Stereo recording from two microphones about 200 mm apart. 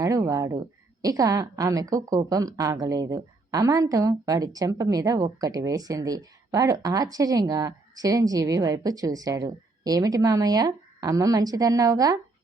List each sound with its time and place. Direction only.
0.0 s a woman's voice: 15° right (ahead or behind)